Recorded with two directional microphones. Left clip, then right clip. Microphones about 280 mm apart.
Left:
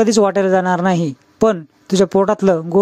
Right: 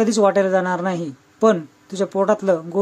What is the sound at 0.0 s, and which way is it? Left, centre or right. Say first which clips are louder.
Speech: left 3 dB; left.